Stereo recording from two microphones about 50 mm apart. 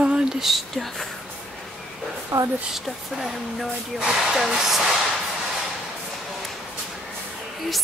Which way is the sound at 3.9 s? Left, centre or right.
Centre.